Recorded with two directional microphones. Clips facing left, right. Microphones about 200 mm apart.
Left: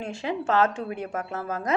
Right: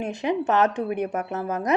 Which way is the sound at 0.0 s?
20° right (ahead or behind).